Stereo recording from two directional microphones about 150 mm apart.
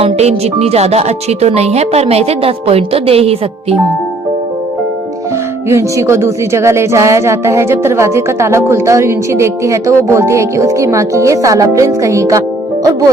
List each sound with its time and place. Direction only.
0.0 s speech: 45° right (ahead or behind)
5.6 s speech: 20° right (ahead or behind)